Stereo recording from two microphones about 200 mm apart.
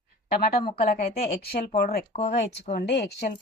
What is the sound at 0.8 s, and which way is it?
A woman's voice, 50° left (ahead or behind).